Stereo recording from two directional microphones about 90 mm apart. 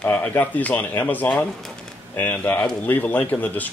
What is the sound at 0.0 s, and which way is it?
Speech, 20° left (ahead or behind).